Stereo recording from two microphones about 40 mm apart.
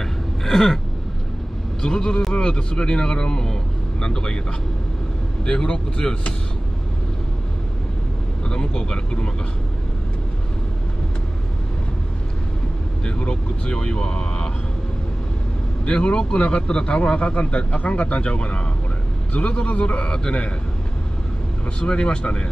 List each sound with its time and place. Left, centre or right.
0.0 s a sound: centre
1.8 s a man's voice: centre
5.4 s a man's voice: left
8.5 s a man's voice: centre
13.2 s speech: left
15.8 s a man's voice: left
20.1 s a man's voice: left
21.7 s a man's voice: left